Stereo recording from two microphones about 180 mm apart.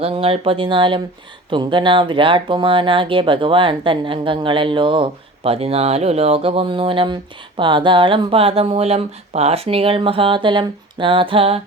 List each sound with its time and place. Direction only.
0.0 s speech: 30° right (ahead or behind)